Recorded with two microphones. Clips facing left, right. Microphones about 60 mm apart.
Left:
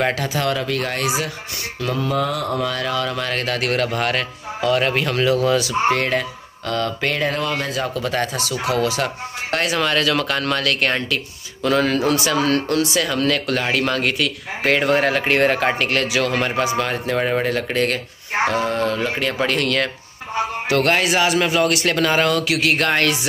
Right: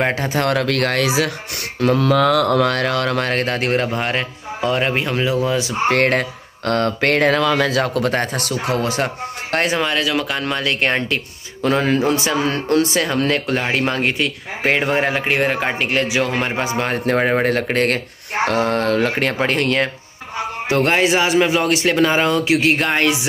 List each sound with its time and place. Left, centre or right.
0.1 s speech: right
0.4 s speech: right
2.0 s speech: right
5.9 s a sound: right
7.3 s speech: right
7.8 s a sound: right
8.1 s speech: right
9.8 s speech: centre; by 19.3 s right
19.3 s speech: right
22.8 s speech: centre